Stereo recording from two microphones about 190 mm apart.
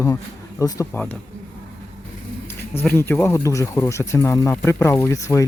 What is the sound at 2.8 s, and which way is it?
Speech, 10° left (ahead or behind).